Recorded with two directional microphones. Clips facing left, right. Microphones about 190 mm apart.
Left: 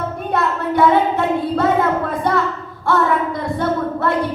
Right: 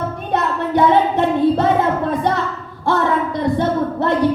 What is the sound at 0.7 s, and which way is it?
Child singing, 25° right (ahead or behind).